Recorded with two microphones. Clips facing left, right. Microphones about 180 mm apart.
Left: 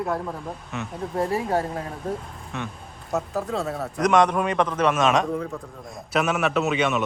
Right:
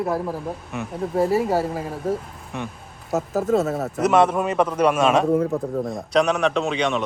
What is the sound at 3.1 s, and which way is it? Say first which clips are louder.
Speech: right 5 dB; 40° right (ahead or behind).